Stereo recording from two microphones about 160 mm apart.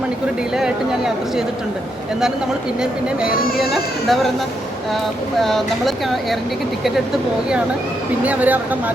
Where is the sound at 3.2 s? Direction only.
65° left (ahead or behind).